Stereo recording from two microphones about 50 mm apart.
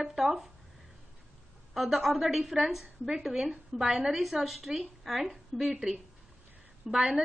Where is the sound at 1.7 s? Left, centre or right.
Centre.